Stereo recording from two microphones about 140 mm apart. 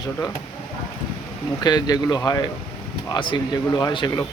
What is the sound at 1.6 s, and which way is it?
Speech, 30° left (ahead or behind).